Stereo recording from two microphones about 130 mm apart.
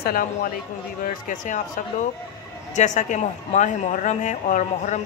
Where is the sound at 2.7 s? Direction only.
65° left (ahead or behind).